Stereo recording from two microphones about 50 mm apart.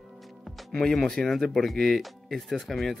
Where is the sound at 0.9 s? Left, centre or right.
Centre.